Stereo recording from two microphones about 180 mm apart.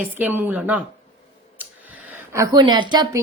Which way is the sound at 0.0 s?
10° right (ahead or behind).